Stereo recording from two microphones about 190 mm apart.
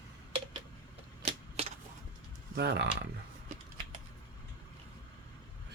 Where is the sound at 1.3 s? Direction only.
30° right (ahead or behind).